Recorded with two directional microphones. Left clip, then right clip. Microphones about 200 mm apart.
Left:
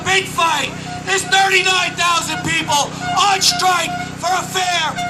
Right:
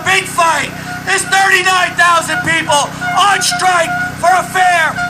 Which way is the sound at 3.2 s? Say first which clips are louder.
Right 2 dB; 15° right (ahead or behind).